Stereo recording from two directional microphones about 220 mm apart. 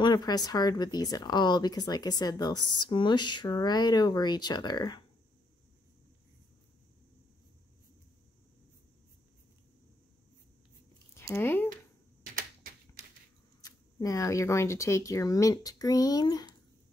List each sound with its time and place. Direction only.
0.0 s speech: 20° left (ahead or behind)
11.1 s a sound: 10° left (ahead or behind)
13.6 s speech: 15° left (ahead or behind)